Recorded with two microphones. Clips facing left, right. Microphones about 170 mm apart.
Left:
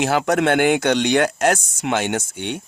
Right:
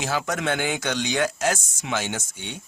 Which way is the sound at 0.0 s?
65° left (ahead or behind).